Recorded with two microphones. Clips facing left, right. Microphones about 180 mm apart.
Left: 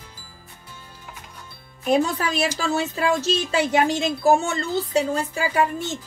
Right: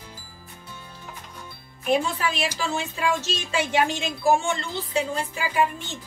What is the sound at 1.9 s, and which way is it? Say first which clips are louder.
Speech: left 3 dB; 40° left (ahead or behind).